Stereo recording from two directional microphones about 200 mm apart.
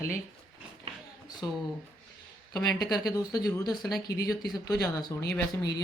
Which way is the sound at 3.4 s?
20° left (ahead or behind).